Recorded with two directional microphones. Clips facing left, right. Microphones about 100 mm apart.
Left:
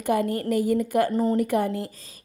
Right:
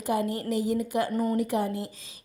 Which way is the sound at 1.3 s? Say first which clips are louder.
Left 4 dB; 55° left (ahead or behind).